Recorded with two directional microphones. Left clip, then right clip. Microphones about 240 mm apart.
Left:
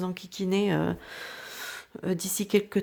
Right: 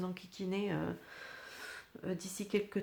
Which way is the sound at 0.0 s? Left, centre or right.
Left.